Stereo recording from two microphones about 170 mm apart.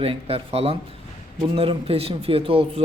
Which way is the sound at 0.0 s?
35° right (ahead or behind).